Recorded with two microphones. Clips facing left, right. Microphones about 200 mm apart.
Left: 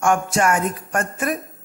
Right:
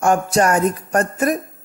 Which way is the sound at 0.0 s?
35° right (ahead or behind).